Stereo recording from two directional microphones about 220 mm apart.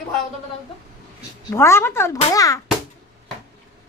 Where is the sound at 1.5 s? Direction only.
10° left (ahead or behind).